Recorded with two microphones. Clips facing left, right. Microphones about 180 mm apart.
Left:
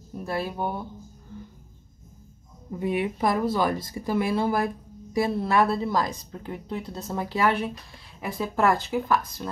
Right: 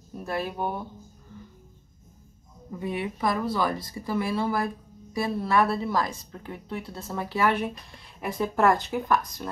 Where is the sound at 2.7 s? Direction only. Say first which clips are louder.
Left 4 dB; 20° left (ahead or behind).